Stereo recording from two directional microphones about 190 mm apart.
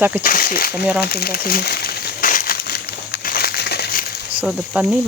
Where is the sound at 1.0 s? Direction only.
55° left (ahead or behind).